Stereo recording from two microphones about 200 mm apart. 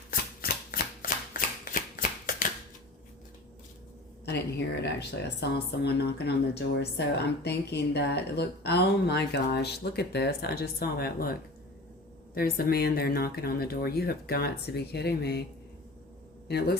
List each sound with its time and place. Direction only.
0.1 s a sound: 45° left (ahead or behind)
4.3 s speech: 55° left (ahead or behind)
16.5 s speech: 55° left (ahead or behind)